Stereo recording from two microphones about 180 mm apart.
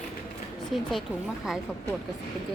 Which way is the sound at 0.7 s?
Centre (ahead or behind).